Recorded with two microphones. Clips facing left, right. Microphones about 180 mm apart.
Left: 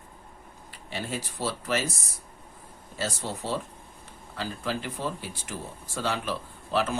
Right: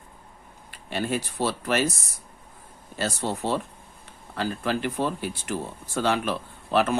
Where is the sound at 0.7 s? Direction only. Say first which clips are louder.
Right 6 dB; 60° right (ahead or behind).